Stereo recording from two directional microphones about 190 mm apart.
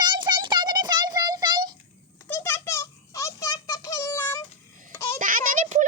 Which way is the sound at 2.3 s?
15° left (ahead or behind).